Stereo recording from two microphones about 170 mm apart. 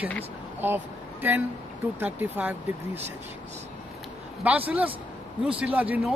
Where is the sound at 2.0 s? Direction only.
10° right (ahead or behind).